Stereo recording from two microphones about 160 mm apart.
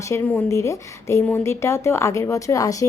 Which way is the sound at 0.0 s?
15° left (ahead or behind).